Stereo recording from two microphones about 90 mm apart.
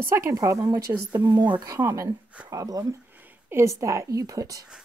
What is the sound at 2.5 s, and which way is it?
Speech, 40° right (ahead or behind).